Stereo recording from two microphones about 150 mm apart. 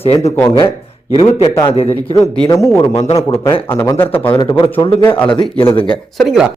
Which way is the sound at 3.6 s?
15° left (ahead or behind).